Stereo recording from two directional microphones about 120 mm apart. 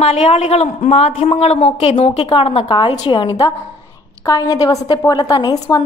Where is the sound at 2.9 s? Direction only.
40° left (ahead or behind).